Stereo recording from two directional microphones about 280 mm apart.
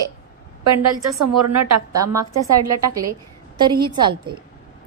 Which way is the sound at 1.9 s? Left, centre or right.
Centre.